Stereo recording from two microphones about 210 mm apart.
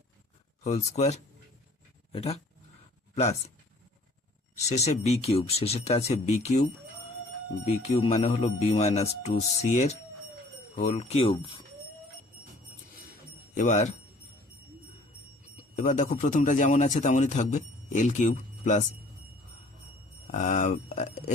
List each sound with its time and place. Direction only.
0.6 s a man's voice: 30° left (ahead or behind)
4.5 s a man's voice: 30° left (ahead or behind)
13.5 s speech: 35° left (ahead or behind)
15.7 s a man's voice: 35° left (ahead or behind)
20.3 s a man's voice: 35° left (ahead or behind)